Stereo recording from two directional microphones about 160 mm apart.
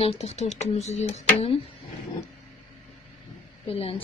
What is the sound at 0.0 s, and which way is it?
Speech, 40° left (ahead or behind).